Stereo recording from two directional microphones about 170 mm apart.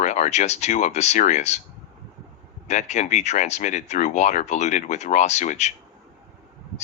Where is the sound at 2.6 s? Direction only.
45° left (ahead or behind).